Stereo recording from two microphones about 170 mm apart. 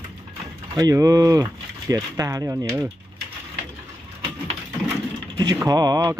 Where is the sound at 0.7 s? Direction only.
20° right (ahead or behind).